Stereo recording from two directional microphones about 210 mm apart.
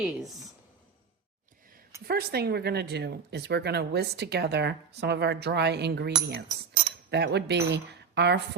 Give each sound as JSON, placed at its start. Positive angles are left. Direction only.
{"t": 0.0, "sound": "speech", "side_deg": 0}
{"t": 2.0, "sound": "speech", "side_deg": -50}